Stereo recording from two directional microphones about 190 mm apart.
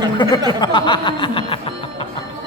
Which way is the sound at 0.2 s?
25° left (ahead or behind).